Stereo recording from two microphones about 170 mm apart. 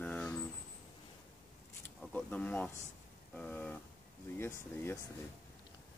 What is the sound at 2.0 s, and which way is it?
Speech, 10° left (ahead or behind).